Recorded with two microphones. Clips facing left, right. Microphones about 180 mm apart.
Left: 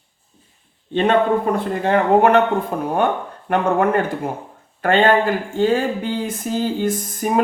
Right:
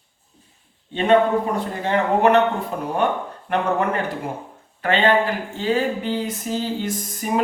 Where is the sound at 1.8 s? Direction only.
50° left (ahead or behind).